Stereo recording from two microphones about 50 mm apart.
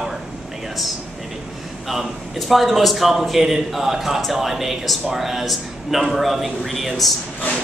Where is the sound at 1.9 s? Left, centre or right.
Centre.